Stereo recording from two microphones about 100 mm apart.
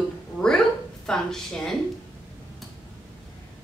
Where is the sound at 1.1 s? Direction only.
5° left (ahead or behind).